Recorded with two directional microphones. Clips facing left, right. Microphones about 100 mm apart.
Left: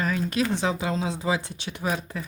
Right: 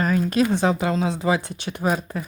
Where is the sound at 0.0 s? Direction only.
45° right (ahead or behind).